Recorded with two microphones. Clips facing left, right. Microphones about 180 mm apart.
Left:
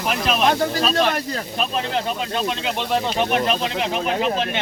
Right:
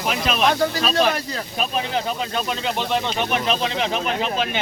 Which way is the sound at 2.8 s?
Centre (ahead or behind).